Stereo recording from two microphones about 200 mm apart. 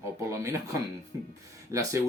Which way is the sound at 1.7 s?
15° right (ahead or behind).